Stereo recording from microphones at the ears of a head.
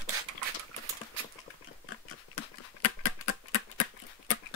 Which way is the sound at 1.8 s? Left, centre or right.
Left.